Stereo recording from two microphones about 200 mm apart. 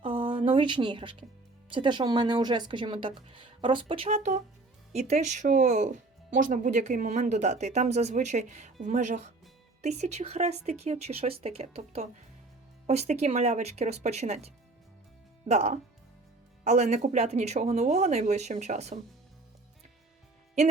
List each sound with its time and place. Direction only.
0.0 s speech: 25° right (ahead or behind)